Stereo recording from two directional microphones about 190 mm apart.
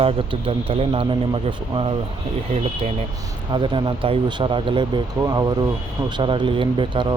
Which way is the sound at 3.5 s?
25° right (ahead or behind).